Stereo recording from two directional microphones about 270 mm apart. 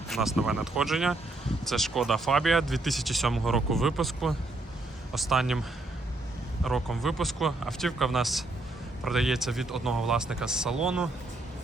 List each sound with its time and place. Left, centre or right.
0.1 s speech: centre
6.7 s speech: centre